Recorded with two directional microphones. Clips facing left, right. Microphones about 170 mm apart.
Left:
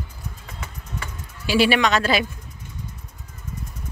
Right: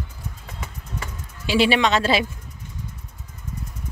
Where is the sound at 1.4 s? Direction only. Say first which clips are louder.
Even; 25° right (ahead or behind).